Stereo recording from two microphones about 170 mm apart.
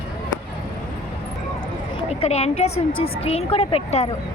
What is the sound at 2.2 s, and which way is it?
A woman's voice, 40° left (ahead or behind).